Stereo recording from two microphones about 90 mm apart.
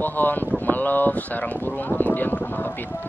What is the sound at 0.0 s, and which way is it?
Speech, 20° left (ahead or behind).